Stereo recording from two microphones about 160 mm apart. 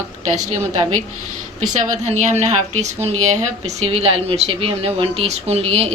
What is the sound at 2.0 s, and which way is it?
A woman's voice, 45° right (ahead or behind).